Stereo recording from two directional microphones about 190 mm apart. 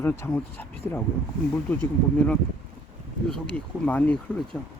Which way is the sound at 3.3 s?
5° left (ahead or behind).